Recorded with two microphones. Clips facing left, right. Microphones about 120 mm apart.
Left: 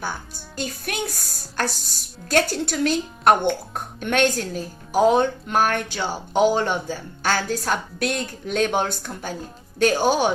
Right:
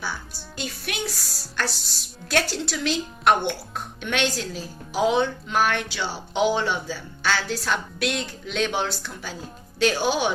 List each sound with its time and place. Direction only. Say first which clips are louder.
0.0 s a woman's voice: left 2 dB; 45° left (ahead or behind)